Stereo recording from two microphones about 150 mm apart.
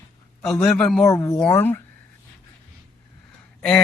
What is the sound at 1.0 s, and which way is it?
Speech, 20° left (ahead or behind).